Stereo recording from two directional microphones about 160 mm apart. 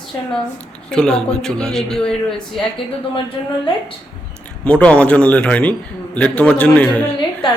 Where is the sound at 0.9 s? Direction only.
5° left (ahead or behind).